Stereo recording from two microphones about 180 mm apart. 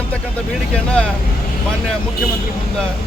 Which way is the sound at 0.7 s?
5° left (ahead or behind).